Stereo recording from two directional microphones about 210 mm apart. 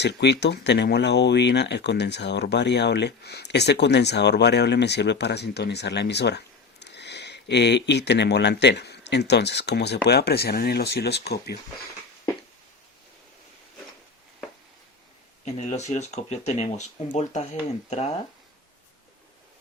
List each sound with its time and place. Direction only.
0.0 s speech: 55° left (ahead or behind)
15.4 s speech: 35° left (ahead or behind)